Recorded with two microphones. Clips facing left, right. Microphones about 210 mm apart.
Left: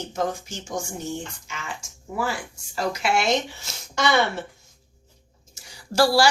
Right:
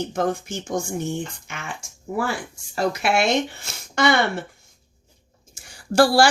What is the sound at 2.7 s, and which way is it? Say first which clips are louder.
Speech: right 3 dB; 60° right (ahead or behind).